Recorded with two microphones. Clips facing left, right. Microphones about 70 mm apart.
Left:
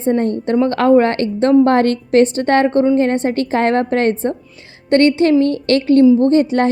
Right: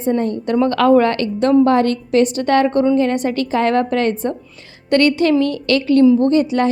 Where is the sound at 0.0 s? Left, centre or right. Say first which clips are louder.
Left 2 dB; left.